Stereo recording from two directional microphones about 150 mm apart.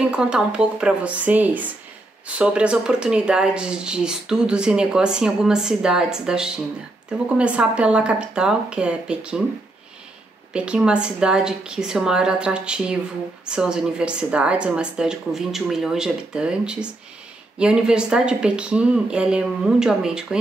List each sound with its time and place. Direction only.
0.0 s speech: 5° right (ahead or behind)
10.5 s speech: 5° right (ahead or behind)